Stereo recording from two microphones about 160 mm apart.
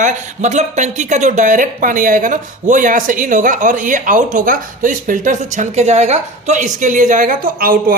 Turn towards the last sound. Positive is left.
turn(degrees=-65)  # may be behind; listen again after turning